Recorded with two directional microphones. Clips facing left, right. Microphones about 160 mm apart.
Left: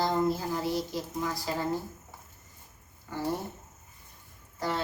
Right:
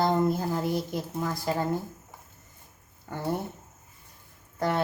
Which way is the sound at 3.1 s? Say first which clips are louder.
Even; 55° right (ahead or behind).